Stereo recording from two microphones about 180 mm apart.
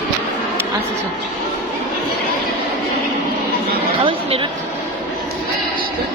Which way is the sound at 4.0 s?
30° right (ahead or behind).